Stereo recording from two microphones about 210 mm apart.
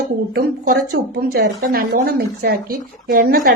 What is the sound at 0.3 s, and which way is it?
A woman's voice, 45° right (ahead or behind).